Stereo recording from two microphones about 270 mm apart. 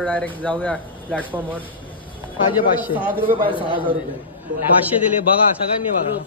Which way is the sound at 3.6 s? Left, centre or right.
Centre.